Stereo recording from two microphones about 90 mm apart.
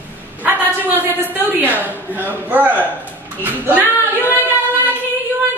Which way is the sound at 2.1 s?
20° right (ahead or behind).